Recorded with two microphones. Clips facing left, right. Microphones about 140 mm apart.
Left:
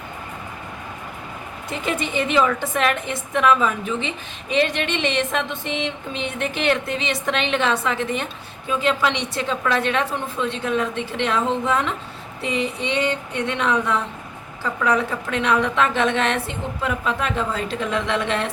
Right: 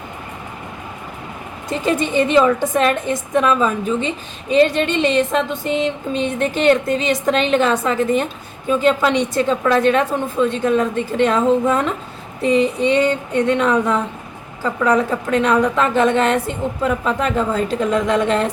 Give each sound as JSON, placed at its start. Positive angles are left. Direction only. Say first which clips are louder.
{"t": 1.7, "sound": "a woman's voice", "louder": "right 7 dB", "side_deg": -35}
{"t": 12.4, "sound": "child singing", "louder": "right 9 dB", "side_deg": -45}
{"t": 12.8, "sound": "a woman's voice", "louder": "right 7 dB", "side_deg": -45}